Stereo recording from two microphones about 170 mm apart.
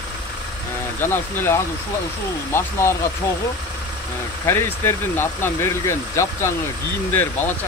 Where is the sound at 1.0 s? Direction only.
15° left (ahead or behind).